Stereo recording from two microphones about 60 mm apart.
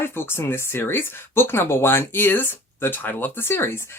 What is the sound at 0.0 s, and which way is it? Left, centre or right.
Speech, left.